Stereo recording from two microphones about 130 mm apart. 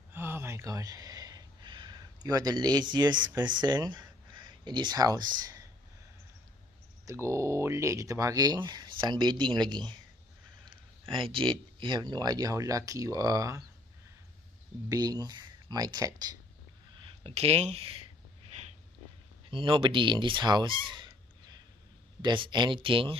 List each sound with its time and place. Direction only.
0.1 s a sound: 15° right (ahead or behind)
7.1 s speech: 20° right (ahead or behind)
14.9 s speech: 30° right (ahead or behind)
17.0 s speech: 50° right (ahead or behind)
19.5 s speech: 40° right (ahead or behind)